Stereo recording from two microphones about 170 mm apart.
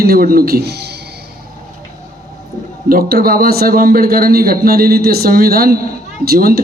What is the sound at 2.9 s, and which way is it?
A man's voice, 60° right (ahead or behind).